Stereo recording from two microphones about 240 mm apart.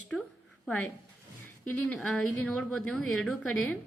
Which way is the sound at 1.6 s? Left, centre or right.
Centre.